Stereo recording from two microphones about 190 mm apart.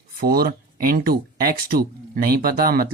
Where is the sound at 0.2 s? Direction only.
50° right (ahead or behind).